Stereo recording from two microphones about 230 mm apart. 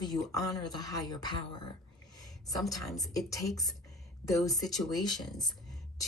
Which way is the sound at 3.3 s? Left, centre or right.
Centre.